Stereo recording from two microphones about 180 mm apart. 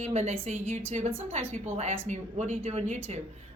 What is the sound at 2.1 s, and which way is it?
Speech, 40° right (ahead or behind).